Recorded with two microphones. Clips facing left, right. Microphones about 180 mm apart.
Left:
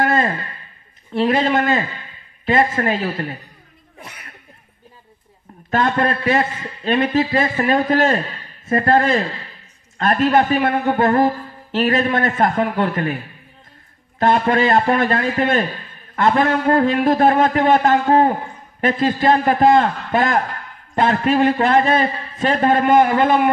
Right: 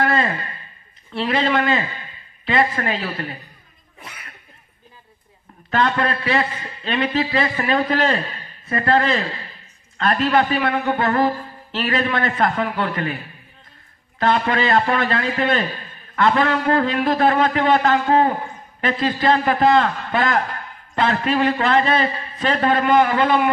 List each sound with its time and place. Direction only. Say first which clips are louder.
0.0 s a sound: left 2 dB; 45° left (ahead or behind)
1.1 s a man's voice: left 3 dB; 45° left (ahead or behind)
5.7 s a man's voice: left 2 dB; 45° left (ahead or behind)
14.2 s a man's voice: left 3 dB; 45° left (ahead or behind)